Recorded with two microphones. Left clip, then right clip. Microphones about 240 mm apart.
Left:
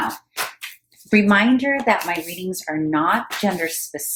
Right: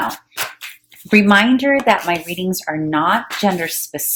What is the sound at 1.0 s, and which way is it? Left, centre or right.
Speech, right.